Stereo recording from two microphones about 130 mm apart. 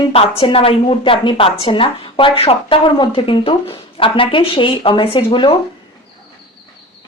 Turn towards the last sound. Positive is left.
turn(degrees=40)  # may be behind; listen again after turning